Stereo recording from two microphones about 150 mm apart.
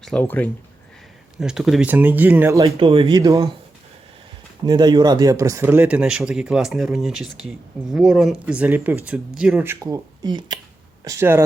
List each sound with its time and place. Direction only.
0.0 s speech: 10° left (ahead or behind)
1.4 s speech: 5° right (ahead or behind)
2.6 s speech: 35° right (ahead or behind)
3.2 s speech: 25° right (ahead or behind)
4.6 s speech: 30° right (ahead or behind); by 9.7 s 10° right (ahead or behind)
9.8 s speech: 25° right (ahead or behind)